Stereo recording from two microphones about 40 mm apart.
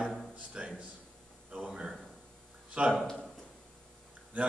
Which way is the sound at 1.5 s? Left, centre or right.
Right.